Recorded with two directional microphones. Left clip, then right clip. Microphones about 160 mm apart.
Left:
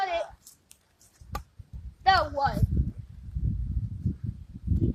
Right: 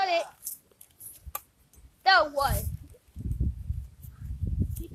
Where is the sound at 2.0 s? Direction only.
35° right (ahead or behind).